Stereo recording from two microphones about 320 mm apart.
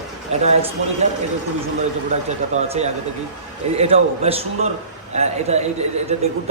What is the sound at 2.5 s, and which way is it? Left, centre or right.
A man's voice, centre.